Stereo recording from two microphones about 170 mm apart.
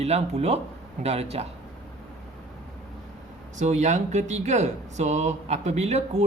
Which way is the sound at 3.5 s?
45° right (ahead or behind).